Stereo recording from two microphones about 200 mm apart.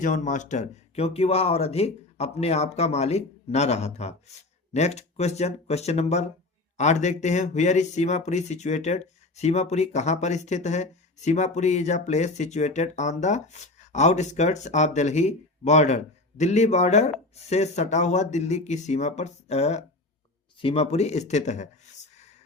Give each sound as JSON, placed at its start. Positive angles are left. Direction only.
{"t": 0.0, "sound": "speech", "side_deg": 40}